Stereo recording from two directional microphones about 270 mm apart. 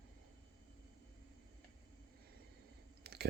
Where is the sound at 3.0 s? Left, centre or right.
Right.